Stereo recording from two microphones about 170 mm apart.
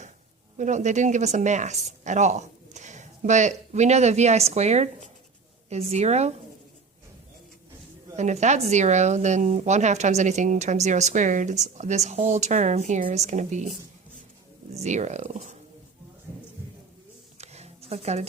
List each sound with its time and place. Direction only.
0.5 s speech: 45° right (ahead or behind)
8.1 s speech: 40° right (ahead or behind)
17.3 s a sound: 40° right (ahead or behind)